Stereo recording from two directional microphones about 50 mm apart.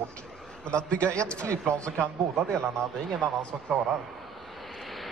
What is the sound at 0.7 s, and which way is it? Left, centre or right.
Speech, left.